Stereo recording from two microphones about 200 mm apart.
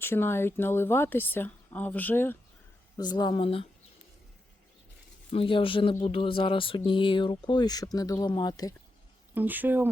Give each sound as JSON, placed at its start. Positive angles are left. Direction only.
{"t": 0.0, "sound": "speech", "side_deg": 10}
{"t": 3.0, "sound": "speech", "side_deg": 20}
{"t": 5.3, "sound": "speech", "side_deg": 25}
{"t": 9.3, "sound": "speech", "side_deg": -10}